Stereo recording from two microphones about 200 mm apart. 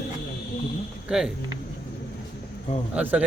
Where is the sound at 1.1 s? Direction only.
5° right (ahead or behind).